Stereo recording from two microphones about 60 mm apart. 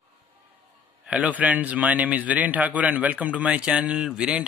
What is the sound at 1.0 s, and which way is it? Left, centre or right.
A man's voice, right.